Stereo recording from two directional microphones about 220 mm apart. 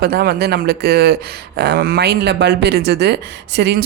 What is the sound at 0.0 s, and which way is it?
Speech, 45° right (ahead or behind).